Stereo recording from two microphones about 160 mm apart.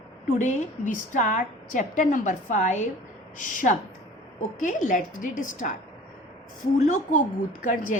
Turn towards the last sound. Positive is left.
turn(degrees=50)  # may be behind; listen again after turning